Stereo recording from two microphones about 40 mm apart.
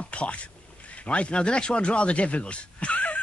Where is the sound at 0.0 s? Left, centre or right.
Left.